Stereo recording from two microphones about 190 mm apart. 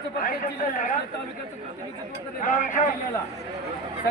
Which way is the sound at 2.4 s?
40° left (ahead or behind).